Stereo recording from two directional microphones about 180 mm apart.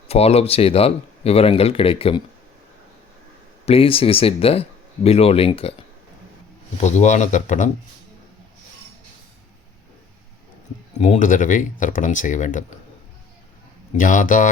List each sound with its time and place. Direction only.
0.1 s speech: 35° left (ahead or behind)
3.7 s speech: 30° left (ahead or behind)
6.7 s speech: 40° left (ahead or behind)
10.9 s speech: 40° left (ahead or behind)
13.9 s speech: 45° left (ahead or behind)